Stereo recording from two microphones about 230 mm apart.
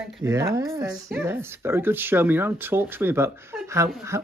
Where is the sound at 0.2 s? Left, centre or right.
Centre.